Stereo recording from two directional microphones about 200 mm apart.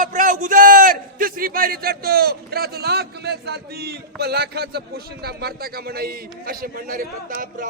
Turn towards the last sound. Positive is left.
turn(degrees=-45)  # may be behind; listen again after turning